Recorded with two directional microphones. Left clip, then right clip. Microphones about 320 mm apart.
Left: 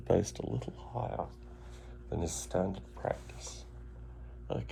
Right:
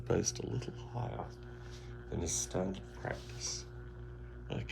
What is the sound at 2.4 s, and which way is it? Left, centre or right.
Speech, centre.